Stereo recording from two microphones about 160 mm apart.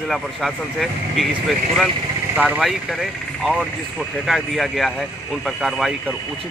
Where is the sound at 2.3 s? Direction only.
5° right (ahead or behind).